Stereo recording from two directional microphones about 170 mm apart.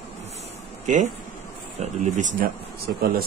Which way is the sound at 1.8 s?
45° right (ahead or behind).